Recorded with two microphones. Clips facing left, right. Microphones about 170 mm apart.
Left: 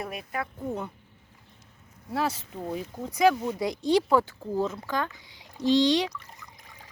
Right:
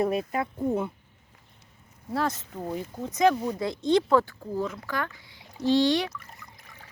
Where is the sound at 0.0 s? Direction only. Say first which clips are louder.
Right 8 dB; 25° right (ahead or behind).